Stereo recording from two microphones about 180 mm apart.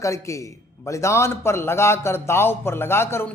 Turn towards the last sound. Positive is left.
turn(degrees=15)  # may be behind; listen again after turning